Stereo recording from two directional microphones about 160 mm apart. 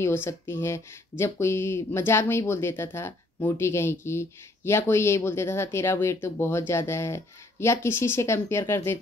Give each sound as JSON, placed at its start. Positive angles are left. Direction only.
{"t": 0.0, "sound": "speech", "side_deg": 15}